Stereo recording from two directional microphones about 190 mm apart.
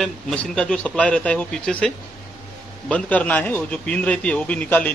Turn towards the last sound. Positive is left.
turn(degrees=10)  # may be behind; listen again after turning